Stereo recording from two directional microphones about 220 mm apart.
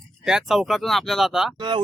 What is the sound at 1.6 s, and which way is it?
Speech, 20° right (ahead or behind).